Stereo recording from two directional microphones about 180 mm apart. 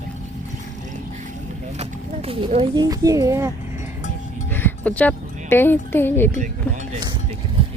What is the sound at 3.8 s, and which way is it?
Music, 45° left (ahead or behind).